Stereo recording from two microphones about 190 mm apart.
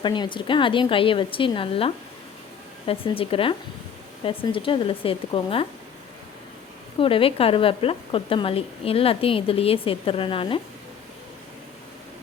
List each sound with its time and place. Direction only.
0.0 s speech: 25° left (ahead or behind)
7.0 s speech: 30° left (ahead or behind)